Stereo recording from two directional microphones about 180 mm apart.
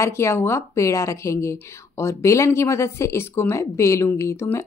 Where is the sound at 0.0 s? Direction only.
15° left (ahead or behind).